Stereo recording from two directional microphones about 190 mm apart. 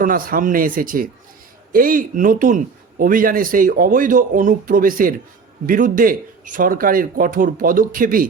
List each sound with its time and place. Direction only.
0.0 s a man's voice: 45° right (ahead or behind)